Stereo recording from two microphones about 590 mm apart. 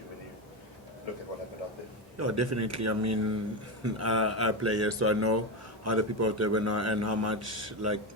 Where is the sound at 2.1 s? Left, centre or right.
Right.